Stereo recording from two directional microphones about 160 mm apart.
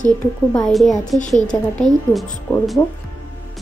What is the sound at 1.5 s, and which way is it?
Speech, 15° left (ahead or behind).